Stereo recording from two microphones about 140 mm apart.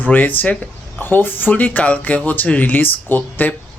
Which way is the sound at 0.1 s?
10° left (ahead or behind).